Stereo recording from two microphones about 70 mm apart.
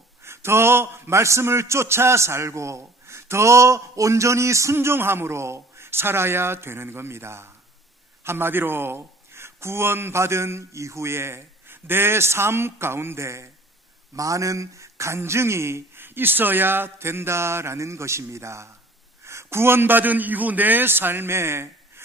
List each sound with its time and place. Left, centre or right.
0.2 s a man's voice: right